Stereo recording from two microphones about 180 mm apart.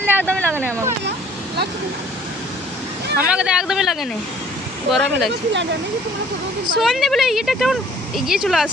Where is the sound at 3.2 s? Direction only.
5° right (ahead or behind).